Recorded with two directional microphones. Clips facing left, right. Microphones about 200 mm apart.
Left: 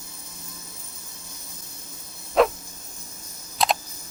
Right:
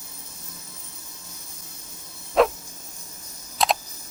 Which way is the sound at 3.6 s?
Centre (ahead or behind).